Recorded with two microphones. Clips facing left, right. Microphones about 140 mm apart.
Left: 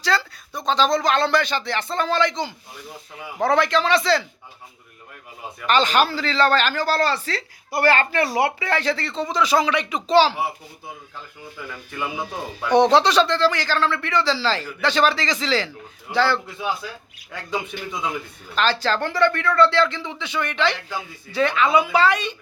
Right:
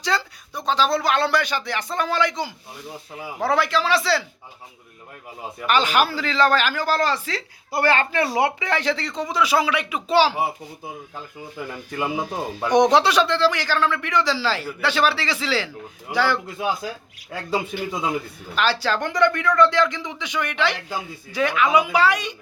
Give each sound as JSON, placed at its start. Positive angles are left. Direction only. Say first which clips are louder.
{"t": 0.0, "sound": "speech", "louder": "left 2 dB", "side_deg": -15}
{"t": 5.6, "sound": "speech", "louder": "left 1 dB", "side_deg": -10}
{"t": 11.9, "sound": "speech", "louder": "right 3 dB", "side_deg": -25}
{"t": 12.7, "sound": "speech", "louder": "left 1 dB", "side_deg": -15}
{"t": 17.9, "sound": "a man's voice", "louder": "right 2 dB", "side_deg": -35}
{"t": 18.5, "sound": "speech", "louder": "left 1 dB", "side_deg": -10}